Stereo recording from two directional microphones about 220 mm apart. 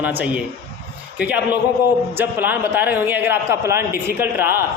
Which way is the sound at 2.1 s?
10° right (ahead or behind).